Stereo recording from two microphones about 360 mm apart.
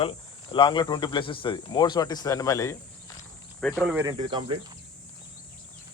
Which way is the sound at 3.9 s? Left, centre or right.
Centre.